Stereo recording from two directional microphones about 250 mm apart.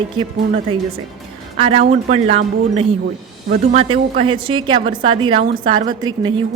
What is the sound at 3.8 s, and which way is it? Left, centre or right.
A woman's voice, right.